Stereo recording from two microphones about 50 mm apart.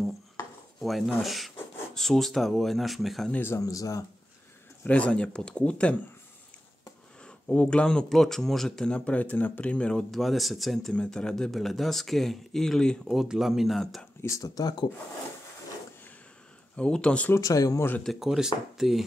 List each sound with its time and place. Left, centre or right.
0.7 s speech: centre
3.5 s speech: left
4.8 s speech: left
7.4 s speech: left
8.1 s speech: centre; by 9.8 s left
9.8 s speech: centre
10.1 s speech: centre
10.9 s speech: centre
11.5 s speech: centre
13.0 s speech: centre
14.2 s speech: left
16.7 s speech: left
17.3 s speech: left
18.2 s speech: centre